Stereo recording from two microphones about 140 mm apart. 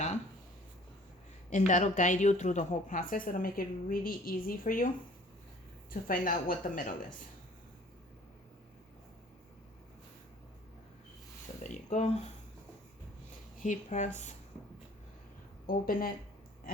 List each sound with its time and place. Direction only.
1.5 s a woman's voice: 60° left (ahead or behind); by 4.9 s 90° left
5.9 s a woman's voice: 85° left
11.6 s speech: 60° left (ahead or behind)
13.6 s speech: 60° left (ahead or behind)
15.6 s speech: 90° left